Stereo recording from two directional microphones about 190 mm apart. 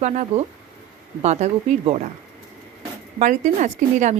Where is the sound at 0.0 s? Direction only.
40° right (ahead or behind).